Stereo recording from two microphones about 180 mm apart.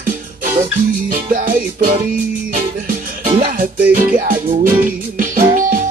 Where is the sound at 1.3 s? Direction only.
50° right (ahead or behind).